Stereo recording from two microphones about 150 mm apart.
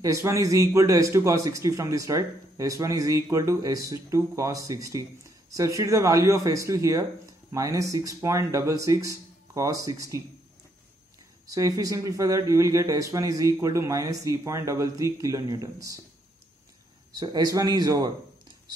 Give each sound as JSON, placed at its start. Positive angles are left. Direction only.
{"t": 0.0, "sound": "a man's voice", "side_deg": -20}
{"t": 11.4, "sound": "a man's voice", "side_deg": -20}
{"t": 17.1, "sound": "a man's voice", "side_deg": -25}